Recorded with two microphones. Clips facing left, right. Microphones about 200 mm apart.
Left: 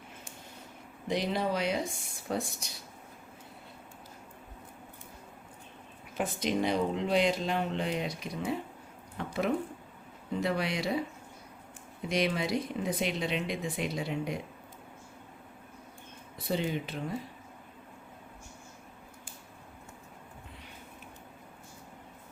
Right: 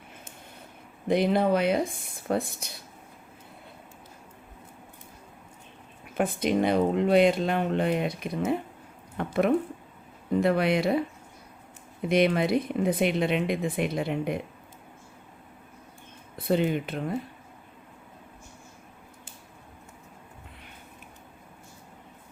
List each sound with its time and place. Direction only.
1.0 s speech: 55° right (ahead or behind)
6.1 s speech: 55° right (ahead or behind)
12.0 s speech: 55° right (ahead or behind)
16.4 s speech: 55° right (ahead or behind)